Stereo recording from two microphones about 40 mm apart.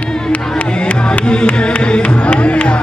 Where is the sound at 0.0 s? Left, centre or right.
Left.